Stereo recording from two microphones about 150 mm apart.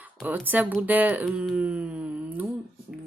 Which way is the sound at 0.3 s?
10° right (ahead or behind).